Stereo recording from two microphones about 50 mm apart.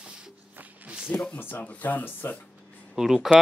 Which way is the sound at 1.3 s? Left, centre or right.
Left.